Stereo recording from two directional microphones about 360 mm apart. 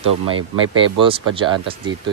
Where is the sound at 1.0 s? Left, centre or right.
Centre.